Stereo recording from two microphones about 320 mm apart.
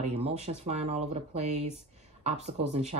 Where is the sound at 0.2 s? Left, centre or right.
Centre.